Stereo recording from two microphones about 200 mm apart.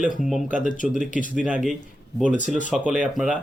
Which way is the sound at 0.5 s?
40° left (ahead or behind).